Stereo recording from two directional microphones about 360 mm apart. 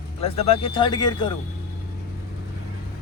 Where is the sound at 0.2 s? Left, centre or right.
Centre.